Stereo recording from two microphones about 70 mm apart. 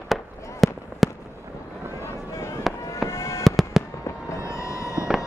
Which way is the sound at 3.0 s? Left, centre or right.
Left.